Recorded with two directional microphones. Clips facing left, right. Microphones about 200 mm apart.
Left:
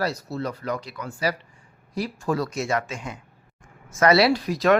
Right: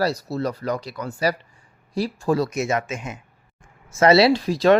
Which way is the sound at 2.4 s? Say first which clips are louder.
Right 2 dB; 20° right (ahead or behind).